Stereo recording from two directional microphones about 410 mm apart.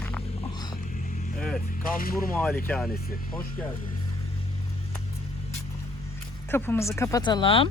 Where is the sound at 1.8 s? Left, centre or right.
Left.